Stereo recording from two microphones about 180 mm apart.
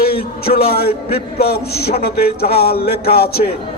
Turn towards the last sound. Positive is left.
turn(degrees=60)  # may be behind; listen again after turning